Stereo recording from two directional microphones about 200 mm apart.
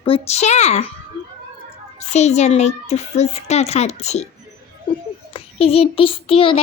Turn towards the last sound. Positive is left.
turn(degrees=25)  # may be behind; listen again after turning